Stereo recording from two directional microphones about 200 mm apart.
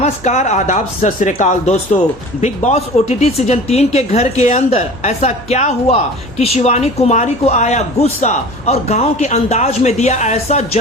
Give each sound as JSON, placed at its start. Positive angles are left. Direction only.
{"t": 0.0, "sound": "speech", "side_deg": 35}